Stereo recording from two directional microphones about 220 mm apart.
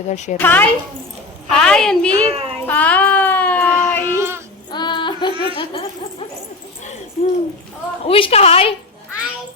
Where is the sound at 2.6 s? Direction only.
5° left (ahead or behind).